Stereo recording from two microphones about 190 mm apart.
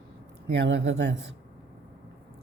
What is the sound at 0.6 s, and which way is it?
Speech, 65° right (ahead or behind).